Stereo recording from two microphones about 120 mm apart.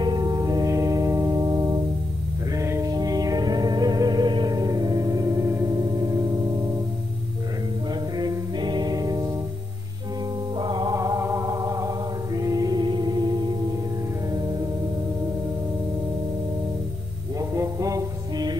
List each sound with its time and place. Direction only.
0.0 s music: 35° right (ahead or behind)
5.8 s gong: 35° right (ahead or behind)
8.2 s music: 35° right (ahead or behind)
10.6 s music: 40° right (ahead or behind)
11.0 s music: 25° right (ahead or behind)
17.4 s music: 25° right (ahead or behind)